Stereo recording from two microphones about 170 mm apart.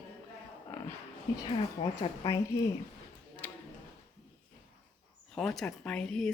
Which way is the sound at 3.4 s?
10° left (ahead or behind).